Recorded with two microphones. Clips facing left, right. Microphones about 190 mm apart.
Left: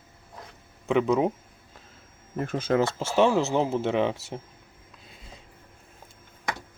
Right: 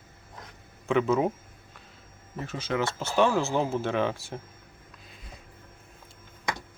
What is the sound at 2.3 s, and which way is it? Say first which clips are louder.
Speech: left 6 dB; 50° left (ahead or behind).